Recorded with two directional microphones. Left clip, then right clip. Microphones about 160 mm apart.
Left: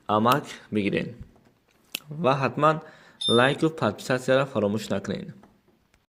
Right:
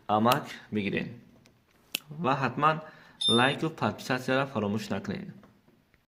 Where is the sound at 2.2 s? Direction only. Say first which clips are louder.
Left 5 dB; 30° left (ahead or behind).